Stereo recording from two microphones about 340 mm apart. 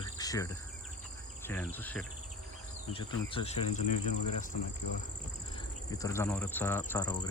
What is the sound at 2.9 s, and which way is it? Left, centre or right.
Speech, centre.